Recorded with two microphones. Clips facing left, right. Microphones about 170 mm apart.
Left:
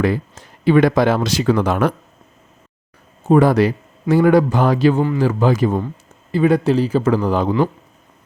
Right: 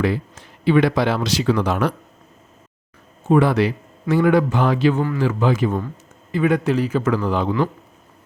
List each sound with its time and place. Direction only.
0.0 s speech: 45° left (ahead or behind)
3.2 s a man's voice: 40° left (ahead or behind)